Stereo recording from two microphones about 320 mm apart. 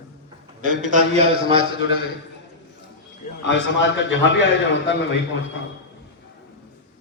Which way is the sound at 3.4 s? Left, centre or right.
Left.